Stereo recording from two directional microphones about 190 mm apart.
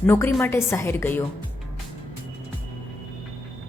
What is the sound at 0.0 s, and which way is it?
Speech, 10° left (ahead or behind).